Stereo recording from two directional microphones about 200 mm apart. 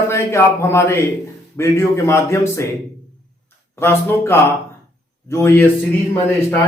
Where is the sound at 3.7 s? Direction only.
10° left (ahead or behind).